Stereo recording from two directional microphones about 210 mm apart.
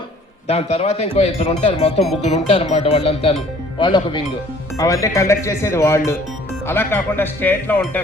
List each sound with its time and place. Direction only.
0.4 s speech: 30° left (ahead or behind); by 8.0 s 10° left (ahead or behind)